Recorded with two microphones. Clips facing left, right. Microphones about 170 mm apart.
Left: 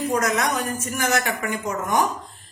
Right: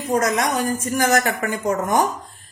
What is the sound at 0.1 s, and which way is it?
A woman's voice, 30° right (ahead or behind).